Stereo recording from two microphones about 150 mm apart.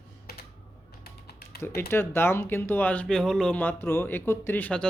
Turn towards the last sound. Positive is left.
turn(degrees=10)  # may be behind; listen again after turning